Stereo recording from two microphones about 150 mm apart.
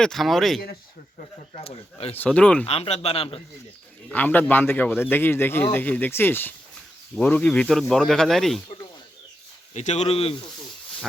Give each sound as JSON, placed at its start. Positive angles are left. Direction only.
{"t": 0.0, "sound": "speech", "side_deg": 0}
{"t": 1.5, "sound": "speech", "side_deg": 40}
{"t": 2.1, "sound": "speech", "side_deg": 10}
{"t": 2.6, "sound": "speech", "side_deg": 40}
{"t": 4.1, "sound": "speech", "side_deg": 10}
{"t": 9.7, "sound": "speech", "side_deg": 50}